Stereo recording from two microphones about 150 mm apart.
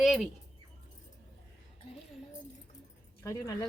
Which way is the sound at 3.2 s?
20° left (ahead or behind).